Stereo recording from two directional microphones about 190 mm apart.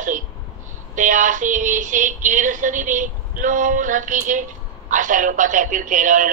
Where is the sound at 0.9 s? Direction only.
45° right (ahead or behind).